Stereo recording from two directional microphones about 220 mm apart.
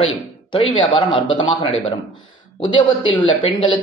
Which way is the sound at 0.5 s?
20° left (ahead or behind).